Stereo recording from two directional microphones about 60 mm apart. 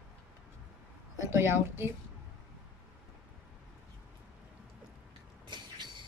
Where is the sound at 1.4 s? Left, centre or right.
Right.